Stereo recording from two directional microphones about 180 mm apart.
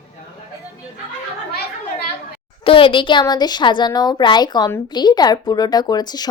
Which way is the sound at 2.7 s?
30° left (ahead or behind).